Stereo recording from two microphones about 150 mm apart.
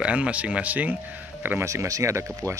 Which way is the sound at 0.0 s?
10° right (ahead or behind).